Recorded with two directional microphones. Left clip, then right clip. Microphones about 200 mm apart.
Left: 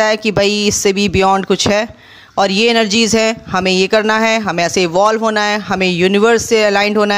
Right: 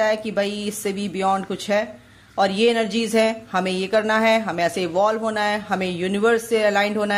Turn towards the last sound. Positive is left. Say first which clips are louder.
# left 7 dB
turn(degrees=30)  # may be behind; listen again after turning